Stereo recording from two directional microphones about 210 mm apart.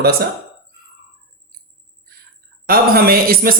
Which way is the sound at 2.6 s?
45° right (ahead or behind).